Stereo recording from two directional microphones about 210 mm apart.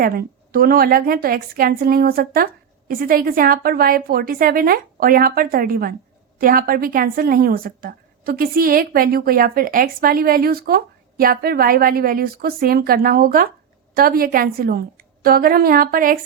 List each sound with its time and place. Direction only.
0.0 s a woman's voice: 45° right (ahead or behind)